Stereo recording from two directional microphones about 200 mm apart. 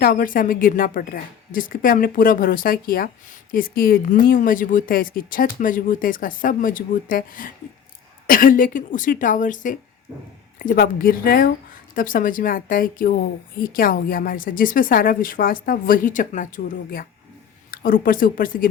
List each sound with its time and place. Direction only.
0.0 s a woman's voice: 45° left (ahead or behind)